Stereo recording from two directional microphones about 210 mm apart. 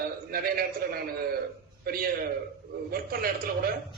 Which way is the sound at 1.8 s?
45° right (ahead or behind).